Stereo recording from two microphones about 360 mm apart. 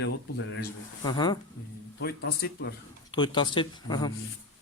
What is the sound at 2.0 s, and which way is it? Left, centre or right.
Speech, left.